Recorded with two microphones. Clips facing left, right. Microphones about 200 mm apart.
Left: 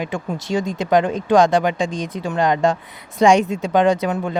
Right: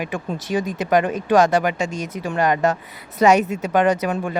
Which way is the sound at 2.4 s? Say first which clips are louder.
Left 1 dB; 10° right (ahead or behind).